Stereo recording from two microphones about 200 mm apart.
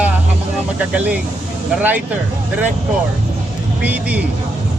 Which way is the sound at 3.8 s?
5° right (ahead or behind).